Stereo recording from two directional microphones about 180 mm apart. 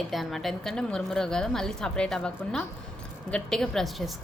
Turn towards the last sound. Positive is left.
turn(degrees=0)  # may be behind; listen again after turning